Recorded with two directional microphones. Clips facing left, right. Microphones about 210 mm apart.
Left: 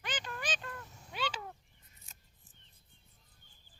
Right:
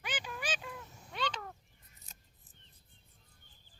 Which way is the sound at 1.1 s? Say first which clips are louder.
Even; 5° left (ahead or behind).